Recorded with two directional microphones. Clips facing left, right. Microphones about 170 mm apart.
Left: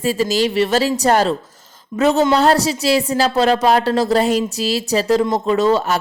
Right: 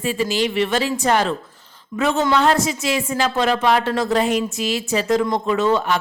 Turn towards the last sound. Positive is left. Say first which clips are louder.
# left 3 dB
turn(degrees=35)  # may be behind; listen again after turning